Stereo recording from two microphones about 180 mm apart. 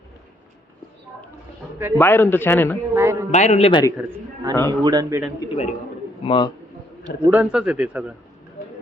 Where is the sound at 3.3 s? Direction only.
40° left (ahead or behind).